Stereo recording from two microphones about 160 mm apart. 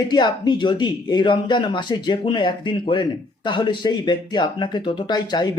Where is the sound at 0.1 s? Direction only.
25° left (ahead or behind).